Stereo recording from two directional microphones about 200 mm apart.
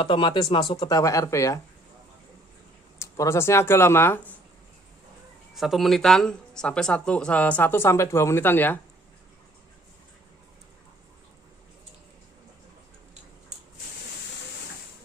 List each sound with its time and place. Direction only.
0.0 s speech: 25° left (ahead or behind)
3.0 s speech: 15° left (ahead or behind)
5.5 s speech: centre (ahead or behind)